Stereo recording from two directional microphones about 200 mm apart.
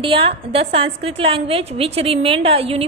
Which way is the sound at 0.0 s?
25° right (ahead or behind).